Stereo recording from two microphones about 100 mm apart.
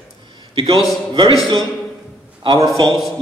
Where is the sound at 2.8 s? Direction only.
55° right (ahead or behind).